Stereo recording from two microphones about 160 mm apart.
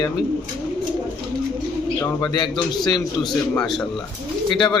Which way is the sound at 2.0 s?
25° left (ahead or behind).